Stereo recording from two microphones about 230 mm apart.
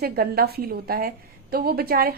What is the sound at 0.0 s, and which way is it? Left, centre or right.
A woman's voice, right.